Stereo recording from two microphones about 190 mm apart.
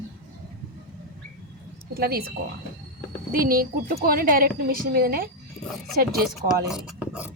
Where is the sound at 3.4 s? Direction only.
50° right (ahead or behind).